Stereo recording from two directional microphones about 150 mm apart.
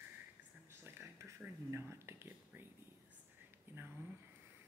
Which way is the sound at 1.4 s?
15° right (ahead or behind).